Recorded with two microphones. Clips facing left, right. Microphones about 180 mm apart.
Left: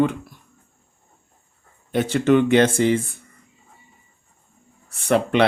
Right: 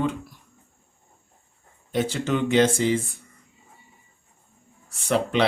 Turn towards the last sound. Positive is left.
turn(degrees=60)  # may be behind; listen again after turning